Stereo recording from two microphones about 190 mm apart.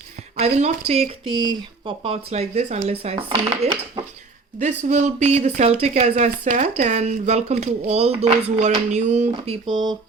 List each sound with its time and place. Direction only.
0.3 s speech: 35° right (ahead or behind)